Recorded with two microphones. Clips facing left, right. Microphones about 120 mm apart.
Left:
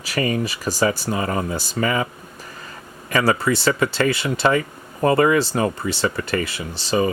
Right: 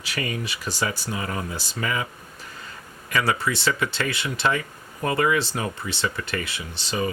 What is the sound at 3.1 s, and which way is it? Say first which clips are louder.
Speech: left 5 dB; 40° left (ahead or behind).